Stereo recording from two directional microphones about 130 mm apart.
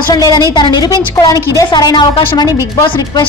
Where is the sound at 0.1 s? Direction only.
30° left (ahead or behind).